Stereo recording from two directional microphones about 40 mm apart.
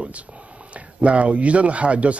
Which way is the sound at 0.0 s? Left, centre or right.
Right.